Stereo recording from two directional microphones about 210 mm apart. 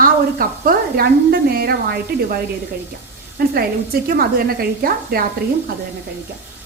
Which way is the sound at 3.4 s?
45° right (ahead or behind).